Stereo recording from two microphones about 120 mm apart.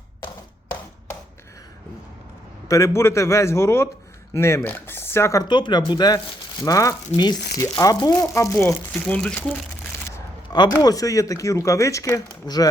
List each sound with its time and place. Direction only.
2.6 s speech: 25° left (ahead or behind)
5.5 s speech: 40° left (ahead or behind); by 8.7 s 25° left (ahead or behind)
8.9 s speech: 10° left (ahead or behind)
10.5 s speech: 35° left (ahead or behind)